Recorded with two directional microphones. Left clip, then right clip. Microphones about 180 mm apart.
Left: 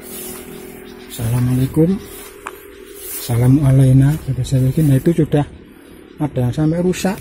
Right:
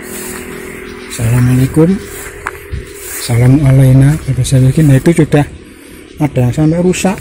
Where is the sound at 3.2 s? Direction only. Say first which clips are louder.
Right 5 dB; 10° left (ahead or behind).